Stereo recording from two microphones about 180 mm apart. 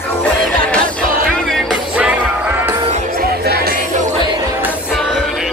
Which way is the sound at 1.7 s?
5° right (ahead or behind).